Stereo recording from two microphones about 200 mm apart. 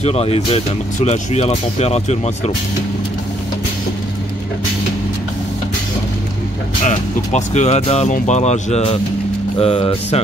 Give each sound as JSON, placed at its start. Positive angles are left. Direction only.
{"t": 0.0, "sound": "music", "side_deg": 30}
{"t": 1.0, "sound": "speech", "side_deg": 35}
{"t": 6.8, "sound": "speech", "side_deg": 35}
{"t": 9.6, "sound": "music", "side_deg": 30}